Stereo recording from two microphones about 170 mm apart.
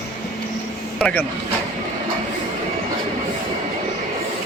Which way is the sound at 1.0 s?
10° left (ahead or behind).